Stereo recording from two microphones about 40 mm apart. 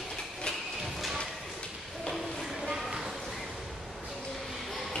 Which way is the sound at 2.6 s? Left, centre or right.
Centre.